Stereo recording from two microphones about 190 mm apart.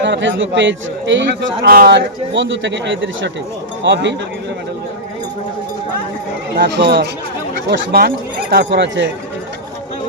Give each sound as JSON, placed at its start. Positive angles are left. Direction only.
{"t": 0.0, "sound": "a man's voice", "side_deg": -70}
{"t": 6.6, "sound": "speech", "side_deg": -60}